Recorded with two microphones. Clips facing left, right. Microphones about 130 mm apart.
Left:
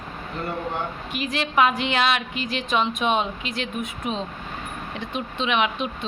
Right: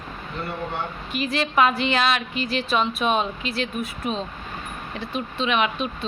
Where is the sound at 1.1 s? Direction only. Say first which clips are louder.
Right 5 dB; 15° left (ahead or behind).